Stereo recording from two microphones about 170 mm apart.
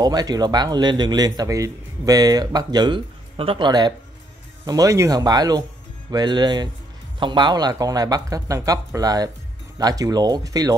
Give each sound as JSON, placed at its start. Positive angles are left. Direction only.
{"t": 0.0, "sound": "a man's voice", "side_deg": -25}